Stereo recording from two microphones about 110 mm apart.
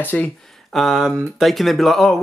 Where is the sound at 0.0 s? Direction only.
15° left (ahead or behind).